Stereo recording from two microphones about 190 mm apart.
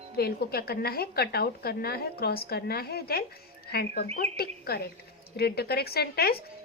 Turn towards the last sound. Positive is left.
turn(degrees=55)  # may be behind; listen again after turning